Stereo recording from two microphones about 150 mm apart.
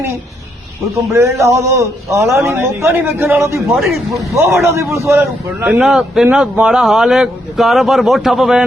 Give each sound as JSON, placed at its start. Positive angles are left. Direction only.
{"t": 1.1, "sound": "a man's voice", "side_deg": -20}
{"t": 3.7, "sound": "speech", "side_deg": 0}
{"t": 4.5, "sound": "a man's voice", "side_deg": -20}
{"t": 5.8, "sound": "speech", "side_deg": -5}